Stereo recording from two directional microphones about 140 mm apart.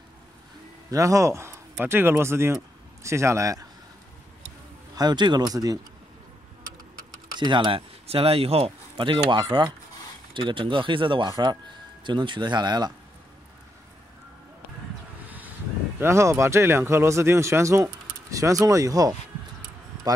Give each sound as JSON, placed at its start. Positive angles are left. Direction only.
{"t": 0.8, "sound": "speech", "side_deg": -25}
{"t": 4.9, "sound": "speech", "side_deg": -30}
{"t": 7.3, "sound": "speech", "side_deg": -35}
{"t": 15.2, "sound": "a sound", "side_deg": -10}
{"t": 16.0, "sound": "speech", "side_deg": -20}